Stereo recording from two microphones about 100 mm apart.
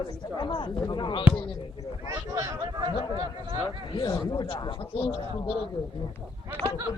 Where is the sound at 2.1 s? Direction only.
30° right (ahead or behind).